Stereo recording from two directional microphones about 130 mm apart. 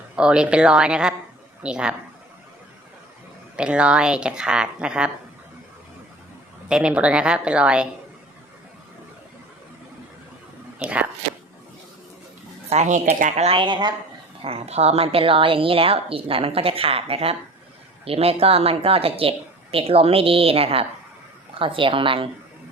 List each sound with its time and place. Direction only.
0.2 s speech: 5° right (ahead or behind)
3.5 s speech: 10° right (ahead or behind)
6.7 s speech: 5° right (ahead or behind)
12.7 s speech: 60° right (ahead or behind); by 13.9 s 35° right (ahead or behind)
14.4 s a woman's voice: 50° right (ahead or behind)